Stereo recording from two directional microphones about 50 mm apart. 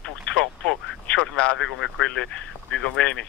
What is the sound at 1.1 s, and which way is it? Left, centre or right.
Speech, left.